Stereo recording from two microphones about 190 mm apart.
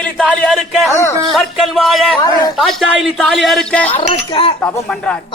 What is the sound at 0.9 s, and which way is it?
Speech, 15° left (ahead or behind).